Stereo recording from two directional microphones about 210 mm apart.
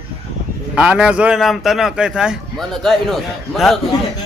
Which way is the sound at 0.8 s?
5° right (ahead or behind).